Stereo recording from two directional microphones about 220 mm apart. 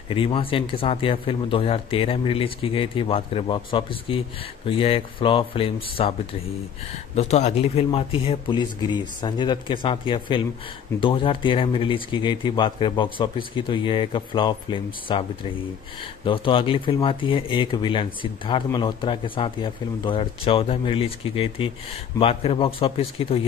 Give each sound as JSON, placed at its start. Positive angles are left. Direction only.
{"t": 0.1, "sound": "speech", "side_deg": 25}
{"t": 7.2, "sound": "speech", "side_deg": 30}
{"t": 16.3, "sound": "speech", "side_deg": 25}